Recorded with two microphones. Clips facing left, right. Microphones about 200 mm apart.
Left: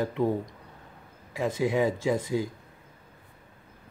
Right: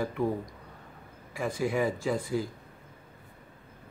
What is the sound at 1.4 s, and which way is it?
Speech, 20° left (ahead or behind).